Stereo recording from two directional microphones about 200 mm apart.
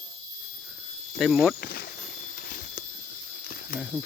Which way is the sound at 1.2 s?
Centre (ahead or behind).